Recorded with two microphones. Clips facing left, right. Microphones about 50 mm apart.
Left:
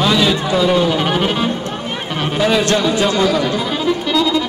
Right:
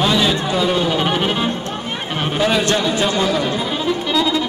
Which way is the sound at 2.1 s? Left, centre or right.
Right.